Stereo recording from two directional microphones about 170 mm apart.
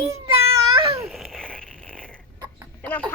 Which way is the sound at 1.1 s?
Centre (ahead or behind).